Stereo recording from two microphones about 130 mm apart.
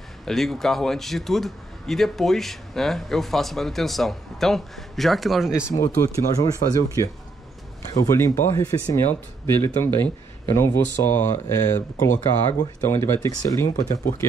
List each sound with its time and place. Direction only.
0.2 s a man's voice: centre (ahead or behind)
5.7 s speech: 40° left (ahead or behind)